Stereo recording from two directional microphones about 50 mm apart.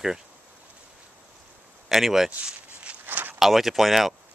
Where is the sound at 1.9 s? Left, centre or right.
Centre.